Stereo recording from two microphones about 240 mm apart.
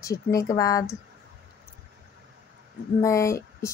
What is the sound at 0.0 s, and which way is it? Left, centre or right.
Speech, centre.